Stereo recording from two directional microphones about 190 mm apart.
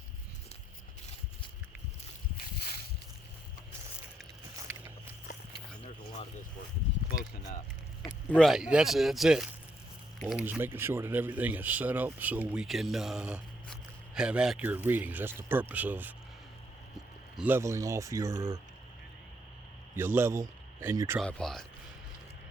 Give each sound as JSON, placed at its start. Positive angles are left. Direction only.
{"t": 8.0, "sound": "speech", "side_deg": 5}
{"t": 17.3, "sound": "speech", "side_deg": -10}
{"t": 20.0, "sound": "a man's voice", "side_deg": -10}
{"t": 21.2, "sound": "speech", "side_deg": 5}